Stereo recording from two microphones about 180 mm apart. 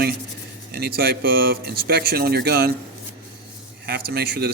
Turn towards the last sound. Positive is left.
turn(degrees=-60)  # may be behind; listen again after turning